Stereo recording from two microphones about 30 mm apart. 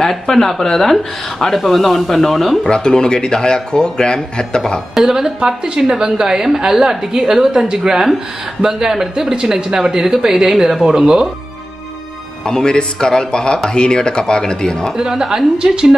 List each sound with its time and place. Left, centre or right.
0.0 s speech: centre
2.7 s speech: left
5.0 s a woman's voice: right
5.5 s a woman's voice: centre
12.4 s speech: left
15.0 s a woman's voice: centre